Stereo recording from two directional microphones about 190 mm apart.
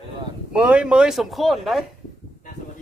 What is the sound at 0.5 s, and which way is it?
Speech, 5° right (ahead or behind).